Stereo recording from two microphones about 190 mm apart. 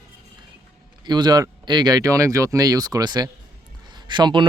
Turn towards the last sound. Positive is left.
turn(degrees=-25)  # may be behind; listen again after turning